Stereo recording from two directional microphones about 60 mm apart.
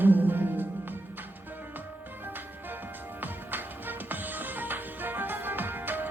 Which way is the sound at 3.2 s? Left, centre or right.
Right.